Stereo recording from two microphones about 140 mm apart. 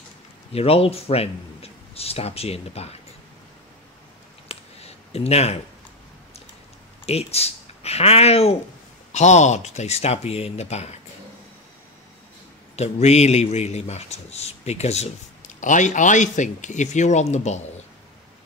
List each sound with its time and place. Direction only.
0.5 s speech: 45° left (ahead or behind)
4.5 s a sound: 45° left (ahead or behind)
7.1 s a man's voice: 50° left (ahead or behind)
12.7 s a man's voice: 50° left (ahead or behind)